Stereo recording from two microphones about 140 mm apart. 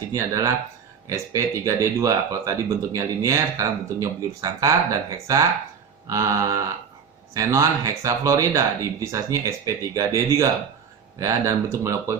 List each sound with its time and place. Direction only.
0.1 s speech: 25° right (ahead or behind)